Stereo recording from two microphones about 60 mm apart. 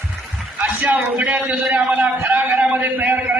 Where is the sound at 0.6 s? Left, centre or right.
Right.